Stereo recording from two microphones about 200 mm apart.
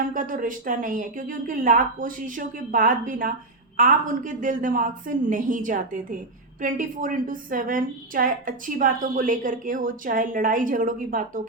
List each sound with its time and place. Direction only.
0.0 s a woman's voice: 40° right (ahead or behind)